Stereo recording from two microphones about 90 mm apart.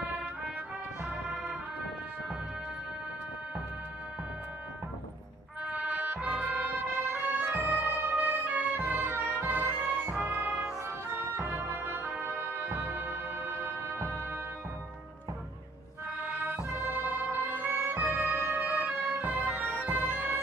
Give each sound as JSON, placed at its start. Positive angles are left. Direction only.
{"t": 5.6, "sound": "music", "side_deg": -15}
{"t": 16.4, "sound": "music", "side_deg": -20}
{"t": 17.3, "sound": "organ", "side_deg": -20}